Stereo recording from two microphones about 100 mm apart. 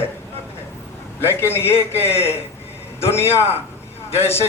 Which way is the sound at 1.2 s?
25° left (ahead or behind).